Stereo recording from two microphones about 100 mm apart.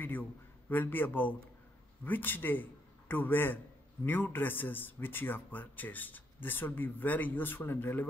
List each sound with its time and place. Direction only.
0.0 s a man's voice: 20° left (ahead or behind)